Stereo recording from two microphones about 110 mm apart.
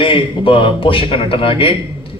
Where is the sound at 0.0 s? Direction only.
55° left (ahead or behind).